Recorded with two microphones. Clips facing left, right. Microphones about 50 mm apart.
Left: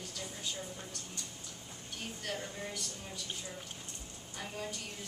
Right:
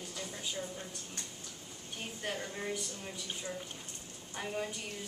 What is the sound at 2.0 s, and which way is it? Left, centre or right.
A woman's voice, centre.